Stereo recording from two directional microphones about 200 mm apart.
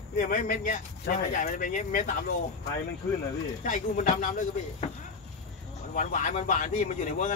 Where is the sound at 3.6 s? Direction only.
40° left (ahead or behind).